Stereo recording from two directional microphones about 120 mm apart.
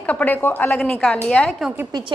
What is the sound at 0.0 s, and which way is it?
Speech, 15° left (ahead or behind).